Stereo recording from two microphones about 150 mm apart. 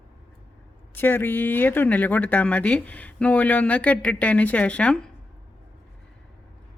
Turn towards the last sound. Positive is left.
turn(degrees=5)  # may be behind; listen again after turning